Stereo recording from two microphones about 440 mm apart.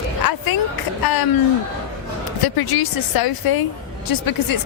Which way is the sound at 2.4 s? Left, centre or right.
Left.